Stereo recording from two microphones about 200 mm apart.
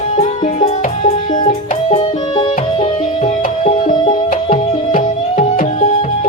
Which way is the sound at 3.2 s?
35° left (ahead or behind).